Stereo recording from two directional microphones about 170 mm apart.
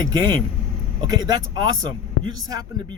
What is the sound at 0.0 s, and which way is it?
Speech, 25° right (ahead or behind).